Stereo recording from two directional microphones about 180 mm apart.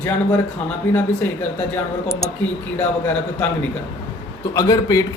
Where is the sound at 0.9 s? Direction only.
10° left (ahead or behind).